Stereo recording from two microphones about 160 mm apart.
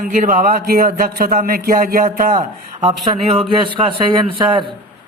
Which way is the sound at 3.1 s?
35° right (ahead or behind).